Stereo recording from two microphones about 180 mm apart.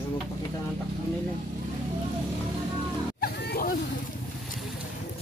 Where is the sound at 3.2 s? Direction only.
55° left (ahead or behind).